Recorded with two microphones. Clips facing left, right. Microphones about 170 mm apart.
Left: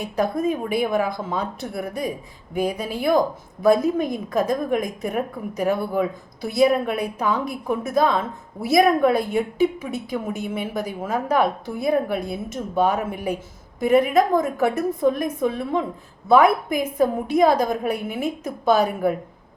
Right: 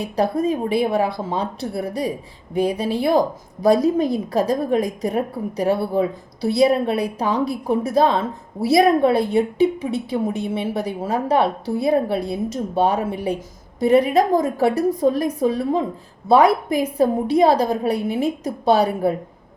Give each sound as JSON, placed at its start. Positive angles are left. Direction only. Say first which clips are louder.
{"t": 0.0, "sound": "a woman's voice", "louder": "right 2 dB", "side_deg": -35}